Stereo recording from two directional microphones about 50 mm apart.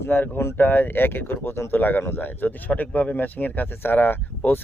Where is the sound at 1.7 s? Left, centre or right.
Left.